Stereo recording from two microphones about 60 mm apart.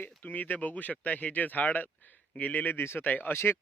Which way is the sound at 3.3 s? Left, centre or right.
Left.